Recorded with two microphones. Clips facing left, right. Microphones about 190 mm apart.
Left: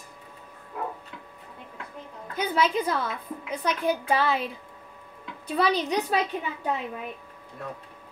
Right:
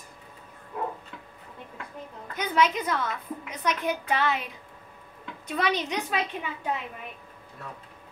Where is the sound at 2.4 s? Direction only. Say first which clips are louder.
Even; 30° left (ahead or behind).